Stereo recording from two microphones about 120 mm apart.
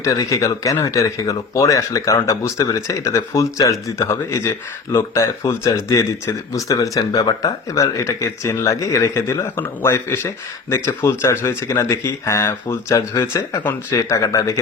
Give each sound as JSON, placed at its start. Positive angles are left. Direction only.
{"t": 0.0, "sound": "speech", "side_deg": 25}